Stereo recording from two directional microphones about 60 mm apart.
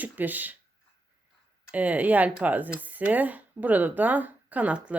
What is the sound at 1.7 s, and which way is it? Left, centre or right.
Speech, right.